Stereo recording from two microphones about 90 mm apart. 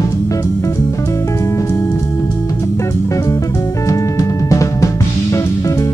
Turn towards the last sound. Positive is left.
turn(degrees=35)  # may be behind; listen again after turning